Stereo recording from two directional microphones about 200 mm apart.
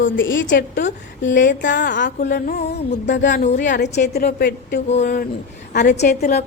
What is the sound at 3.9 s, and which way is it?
Speech, 55° left (ahead or behind).